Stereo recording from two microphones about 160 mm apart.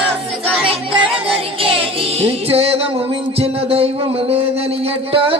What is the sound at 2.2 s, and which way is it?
Music, 40° right (ahead or behind).